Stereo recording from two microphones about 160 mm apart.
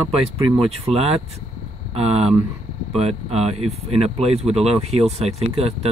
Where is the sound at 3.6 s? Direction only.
40° right (ahead or behind).